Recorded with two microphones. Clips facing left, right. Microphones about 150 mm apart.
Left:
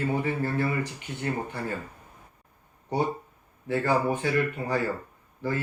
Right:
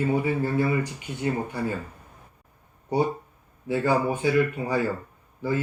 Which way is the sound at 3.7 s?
15° right (ahead or behind).